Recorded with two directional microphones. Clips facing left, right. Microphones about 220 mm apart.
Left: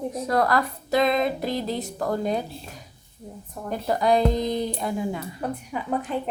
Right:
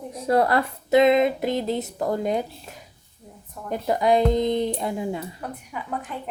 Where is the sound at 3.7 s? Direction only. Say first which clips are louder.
Right 1 dB; 20° right (ahead or behind).